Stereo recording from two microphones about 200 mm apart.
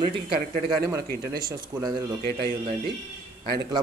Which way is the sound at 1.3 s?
20° right (ahead or behind).